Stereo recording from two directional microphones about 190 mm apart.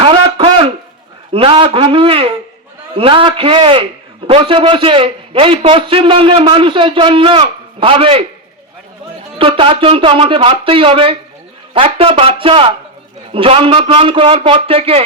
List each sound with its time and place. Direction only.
0.0 s a sound: 25° right (ahead or behind)
1.3 s a man's voice: 30° right (ahead or behind)
9.4 s a man's voice: 30° right (ahead or behind)